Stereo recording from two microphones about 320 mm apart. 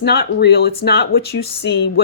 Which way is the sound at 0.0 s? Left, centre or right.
Left.